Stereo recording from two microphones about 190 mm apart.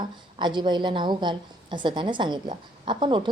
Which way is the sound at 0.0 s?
25° right (ahead or behind).